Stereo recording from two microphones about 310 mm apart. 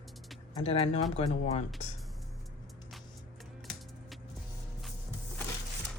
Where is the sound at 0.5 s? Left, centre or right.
Centre.